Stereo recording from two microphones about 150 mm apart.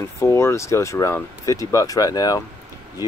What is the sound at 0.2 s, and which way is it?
Speech, 15° left (ahead or behind).